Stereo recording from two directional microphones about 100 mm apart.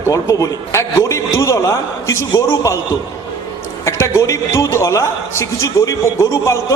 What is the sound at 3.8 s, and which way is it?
A man's voice, 30° left (ahead or behind).